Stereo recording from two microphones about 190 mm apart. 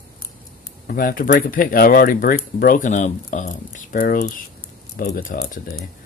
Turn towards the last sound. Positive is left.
turn(degrees=45)  # may be behind; listen again after turning